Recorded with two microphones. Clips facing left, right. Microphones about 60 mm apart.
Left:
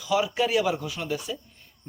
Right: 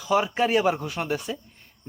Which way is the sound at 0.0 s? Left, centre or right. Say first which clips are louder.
Right 2 dB; right.